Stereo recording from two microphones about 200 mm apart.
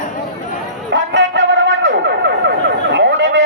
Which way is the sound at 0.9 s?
60° right (ahead or behind).